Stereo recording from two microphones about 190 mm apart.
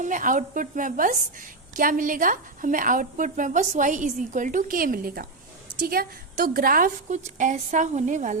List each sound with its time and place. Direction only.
0.0 s a woman's voice: 45° right (ahead or behind)